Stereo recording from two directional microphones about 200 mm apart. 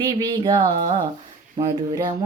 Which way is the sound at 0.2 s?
20° right (ahead or behind).